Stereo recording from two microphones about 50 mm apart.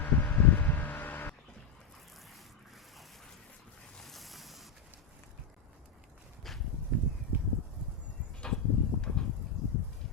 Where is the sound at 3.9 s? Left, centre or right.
Centre.